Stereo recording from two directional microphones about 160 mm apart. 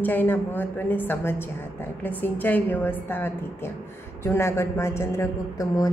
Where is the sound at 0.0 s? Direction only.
10° left (ahead or behind).